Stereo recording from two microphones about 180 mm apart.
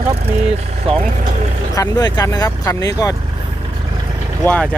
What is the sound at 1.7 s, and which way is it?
Speech, 20° left (ahead or behind).